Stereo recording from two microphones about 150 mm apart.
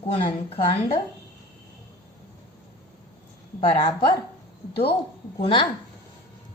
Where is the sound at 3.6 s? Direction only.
40° left (ahead or behind).